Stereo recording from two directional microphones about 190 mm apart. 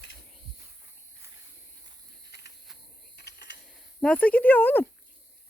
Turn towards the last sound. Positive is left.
turn(degrees=10)  # may be behind; listen again after turning